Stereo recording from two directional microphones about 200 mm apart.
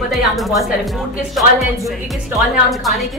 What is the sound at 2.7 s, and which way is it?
Speech, centre (ahead or behind).